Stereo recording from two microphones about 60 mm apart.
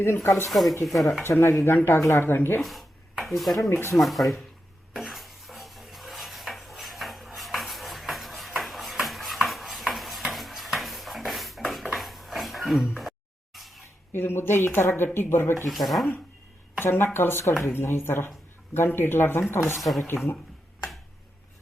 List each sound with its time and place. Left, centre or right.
0.0 s speech: left
0.5 s speech: centre
1.2 s speech: left
2.6 s dishes: centre
3.7 s speech: left
3.9 s speech: centre
4.9 s dishes: centre
13.0 s music: centre
14.1 s speech: left
15.7 s speech: centre
16.8 s speech: left
19.7 s speech: centre